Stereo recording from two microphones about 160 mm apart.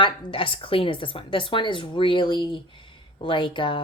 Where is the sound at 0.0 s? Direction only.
30° left (ahead or behind).